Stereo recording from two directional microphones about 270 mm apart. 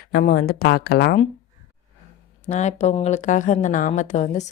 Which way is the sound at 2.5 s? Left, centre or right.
Left.